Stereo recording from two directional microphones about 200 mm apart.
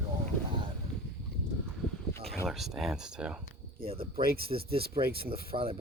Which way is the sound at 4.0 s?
50° right (ahead or behind).